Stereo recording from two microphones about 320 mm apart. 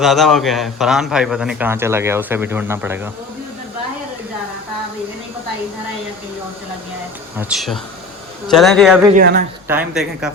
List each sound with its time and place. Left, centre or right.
0.0 s a man's voice: centre
7.3 s a man's voice: centre
9.1 s speech: right
9.6 s a man's voice: centre